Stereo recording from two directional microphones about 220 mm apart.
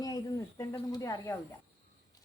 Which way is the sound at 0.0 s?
15° left (ahead or behind).